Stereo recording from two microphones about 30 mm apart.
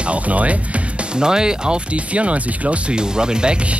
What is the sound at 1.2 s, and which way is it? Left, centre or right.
Speech, right.